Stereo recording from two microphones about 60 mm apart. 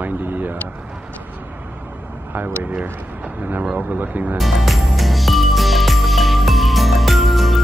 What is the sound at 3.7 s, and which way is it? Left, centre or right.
Speech, right.